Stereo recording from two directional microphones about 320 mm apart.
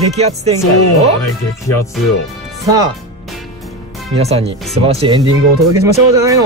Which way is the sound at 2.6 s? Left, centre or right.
Centre.